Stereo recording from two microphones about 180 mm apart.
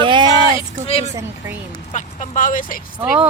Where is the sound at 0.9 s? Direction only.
35° left (ahead or behind); by 2.8 s 50° left (ahead or behind).